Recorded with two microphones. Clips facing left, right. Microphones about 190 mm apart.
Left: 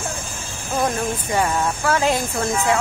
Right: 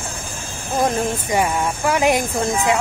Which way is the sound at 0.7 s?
20° right (ahead or behind).